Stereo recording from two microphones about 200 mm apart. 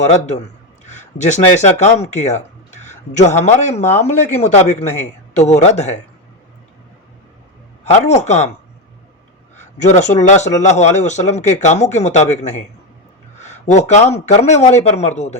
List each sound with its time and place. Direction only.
0.9 s a sound: 35° left (ahead or behind)
1.6 s speech: 35° left (ahead or behind)
7.9 s speech: 35° left (ahead or behind)
9.6 s speech: 35° left (ahead or behind)